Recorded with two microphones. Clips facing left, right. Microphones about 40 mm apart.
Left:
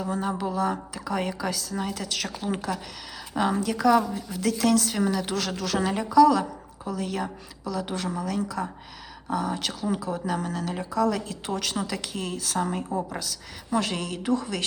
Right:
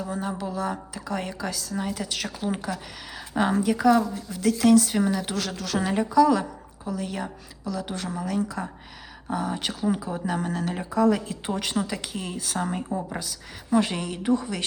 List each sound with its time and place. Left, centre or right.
0.0 s a woman's voice: centre
3.6 s speech: centre
4.1 s a woman's voice: centre